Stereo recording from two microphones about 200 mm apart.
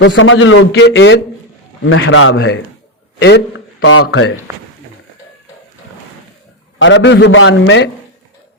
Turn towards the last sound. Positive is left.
turn(degrees=65)  # may be behind; listen again after turning